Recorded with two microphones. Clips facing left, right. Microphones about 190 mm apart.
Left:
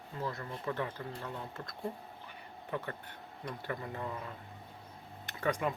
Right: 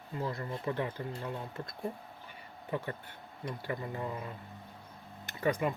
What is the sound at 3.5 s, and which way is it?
Speech, 10° right (ahead or behind).